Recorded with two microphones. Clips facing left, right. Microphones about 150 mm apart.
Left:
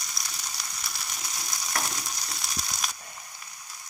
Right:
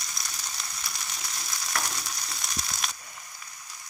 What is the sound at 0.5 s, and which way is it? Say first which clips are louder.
Frying: even; 10° left (ahead or behind).